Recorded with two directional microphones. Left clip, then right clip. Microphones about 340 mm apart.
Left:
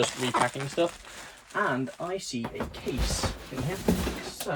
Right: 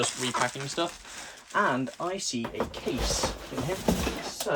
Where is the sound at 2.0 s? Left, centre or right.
Centre.